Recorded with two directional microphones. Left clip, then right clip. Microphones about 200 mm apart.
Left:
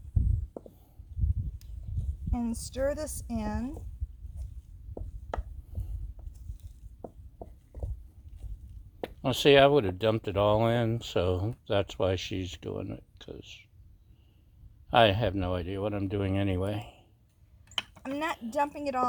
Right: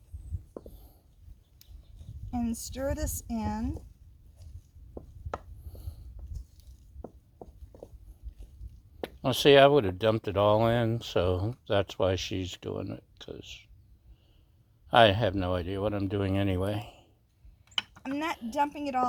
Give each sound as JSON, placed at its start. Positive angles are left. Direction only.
{"t": 0.6, "sound": "heart sounds", "side_deg": 0}
{"t": 2.3, "sound": "speech", "side_deg": 10}
{"t": 5.0, "sound": "chopping", "side_deg": 5}
{"t": 7.0, "sound": "a sound", "side_deg": 0}
{"t": 9.0, "sound": "speech", "side_deg": -15}
{"t": 14.8, "sound": "speech", "side_deg": -15}
{"t": 17.7, "sound": "a sound", "side_deg": 5}
{"t": 18.5, "sound": "speech", "side_deg": 10}